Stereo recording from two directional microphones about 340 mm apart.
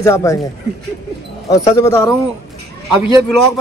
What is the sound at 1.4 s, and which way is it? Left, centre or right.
Speech, centre.